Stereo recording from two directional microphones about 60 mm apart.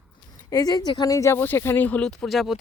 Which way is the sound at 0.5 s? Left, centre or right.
Left.